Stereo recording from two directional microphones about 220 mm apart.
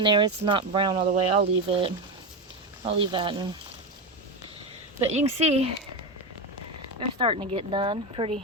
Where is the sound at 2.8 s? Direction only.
20° right (ahead or behind).